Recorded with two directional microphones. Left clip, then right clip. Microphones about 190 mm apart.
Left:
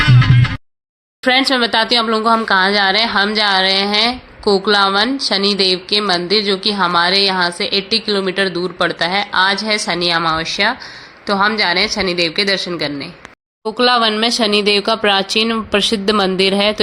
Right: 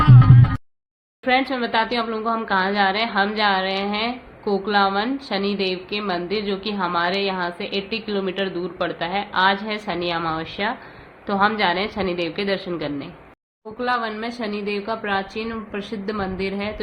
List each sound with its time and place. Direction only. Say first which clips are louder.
1.2 s a woman's voice: left 7 dB; 45° left (ahead or behind); by 13.1 s 25° left (ahead or behind)
13.7 s speech: left 10 dB; 65° left (ahead or behind)